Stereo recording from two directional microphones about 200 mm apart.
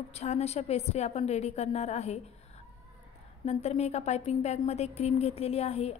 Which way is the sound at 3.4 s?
30° left (ahead or behind).